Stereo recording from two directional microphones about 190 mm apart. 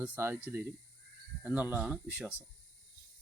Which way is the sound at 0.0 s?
10° right (ahead or behind).